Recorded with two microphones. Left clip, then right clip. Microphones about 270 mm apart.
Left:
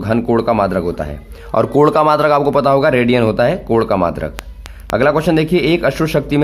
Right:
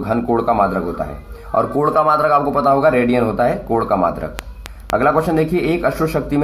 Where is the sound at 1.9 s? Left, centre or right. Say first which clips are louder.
Left 2 dB; left.